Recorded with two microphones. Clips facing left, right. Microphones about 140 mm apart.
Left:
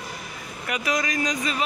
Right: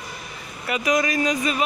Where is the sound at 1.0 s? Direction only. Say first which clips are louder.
Right 4 dB; 25° right (ahead or behind).